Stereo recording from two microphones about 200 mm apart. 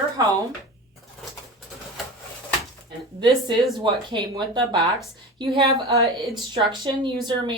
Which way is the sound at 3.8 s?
25° right (ahead or behind).